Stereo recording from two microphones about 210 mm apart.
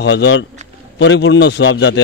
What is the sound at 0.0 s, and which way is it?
Speech, 55° left (ahead or behind).